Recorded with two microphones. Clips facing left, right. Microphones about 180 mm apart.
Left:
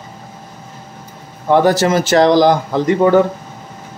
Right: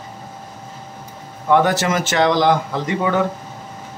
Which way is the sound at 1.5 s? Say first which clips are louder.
Left 4 dB; 35° left (ahead or behind).